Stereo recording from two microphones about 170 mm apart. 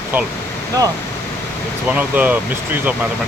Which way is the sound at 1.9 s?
10° right (ahead or behind).